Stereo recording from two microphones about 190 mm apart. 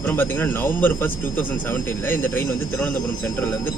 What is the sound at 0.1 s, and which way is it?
A man's voice, 10° left (ahead or behind).